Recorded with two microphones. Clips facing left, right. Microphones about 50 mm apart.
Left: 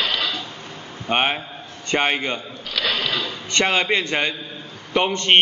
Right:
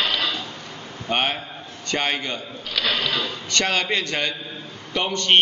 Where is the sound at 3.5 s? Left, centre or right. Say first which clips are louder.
Left 3 dB; left.